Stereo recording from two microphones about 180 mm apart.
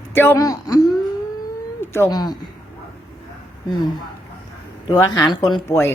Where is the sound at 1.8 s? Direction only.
15° left (ahead or behind).